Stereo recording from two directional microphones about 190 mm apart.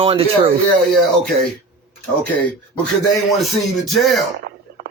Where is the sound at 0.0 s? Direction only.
30° right (ahead or behind).